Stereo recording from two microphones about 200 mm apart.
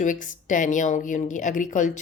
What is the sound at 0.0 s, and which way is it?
Speech, 40° left (ahead or behind).